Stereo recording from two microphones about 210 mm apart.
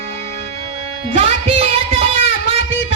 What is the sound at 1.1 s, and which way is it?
Music, 30° right (ahead or behind).